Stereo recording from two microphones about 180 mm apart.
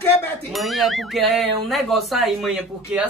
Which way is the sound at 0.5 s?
Centre (ahead or behind).